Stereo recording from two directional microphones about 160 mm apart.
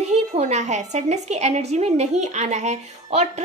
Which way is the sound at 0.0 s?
45° right (ahead or behind).